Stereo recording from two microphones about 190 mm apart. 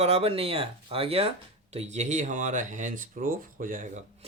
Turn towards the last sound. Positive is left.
turn(degrees=-40)  # may be behind; listen again after turning